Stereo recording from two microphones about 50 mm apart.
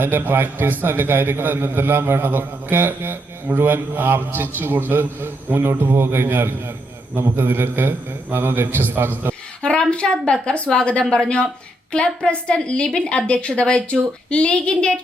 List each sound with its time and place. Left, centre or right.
0.0 s a man's voice: right
9.6 s a woman's voice: centre